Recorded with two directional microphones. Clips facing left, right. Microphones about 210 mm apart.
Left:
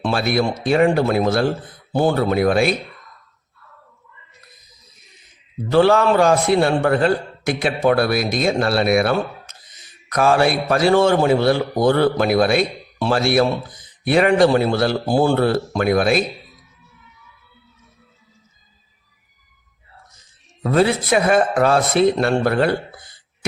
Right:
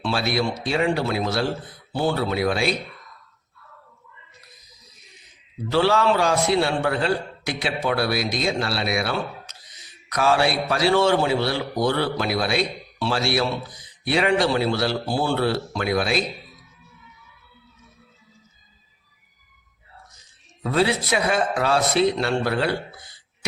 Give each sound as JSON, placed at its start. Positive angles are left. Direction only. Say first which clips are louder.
{"t": 0.0, "sound": "a man's voice", "louder": "left 4 dB", "side_deg": 50}
{"t": 5.7, "sound": "a man's voice", "louder": "left 5 dB", "side_deg": 50}
{"t": 20.7, "sound": "a man's voice", "louder": "left 5 dB", "side_deg": 50}